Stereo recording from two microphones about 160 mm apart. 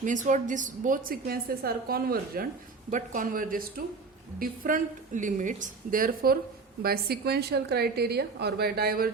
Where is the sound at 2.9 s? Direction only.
55° right (ahead or behind).